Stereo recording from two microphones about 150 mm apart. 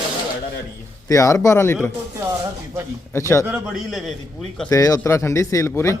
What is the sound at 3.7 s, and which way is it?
Speech, centre (ahead or behind).